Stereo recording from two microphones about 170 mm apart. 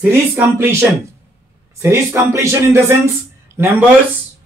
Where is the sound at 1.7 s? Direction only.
15° right (ahead or behind).